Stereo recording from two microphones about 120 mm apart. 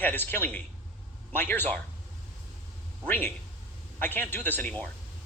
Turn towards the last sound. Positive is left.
turn(degrees=15)  # may be behind; listen again after turning